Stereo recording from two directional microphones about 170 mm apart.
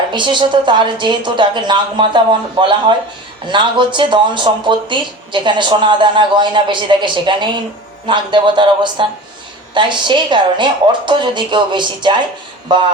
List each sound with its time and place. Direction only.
0.1 s speech: 25° right (ahead or behind)